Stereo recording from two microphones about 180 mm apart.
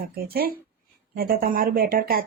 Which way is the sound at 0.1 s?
55° right (ahead or behind).